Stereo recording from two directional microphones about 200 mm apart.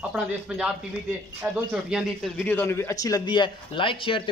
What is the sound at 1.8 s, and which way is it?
Speech, 5° right (ahead or behind).